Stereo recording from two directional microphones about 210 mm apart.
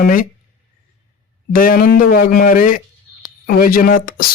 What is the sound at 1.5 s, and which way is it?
Speech, 40° left (ahead or behind).